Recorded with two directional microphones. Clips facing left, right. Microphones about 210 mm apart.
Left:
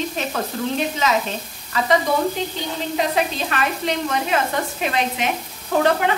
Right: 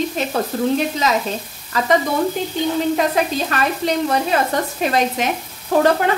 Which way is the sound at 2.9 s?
45° right (ahead or behind).